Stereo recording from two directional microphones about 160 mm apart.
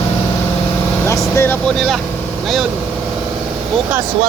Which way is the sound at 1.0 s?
15° left (ahead or behind).